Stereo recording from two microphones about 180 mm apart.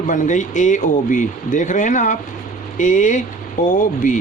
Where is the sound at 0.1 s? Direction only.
45° left (ahead or behind).